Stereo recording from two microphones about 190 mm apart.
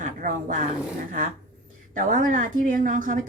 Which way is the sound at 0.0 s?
45° right (ahead or behind).